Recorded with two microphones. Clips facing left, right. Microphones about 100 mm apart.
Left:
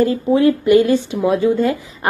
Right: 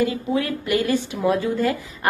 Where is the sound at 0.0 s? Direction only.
25° left (ahead or behind).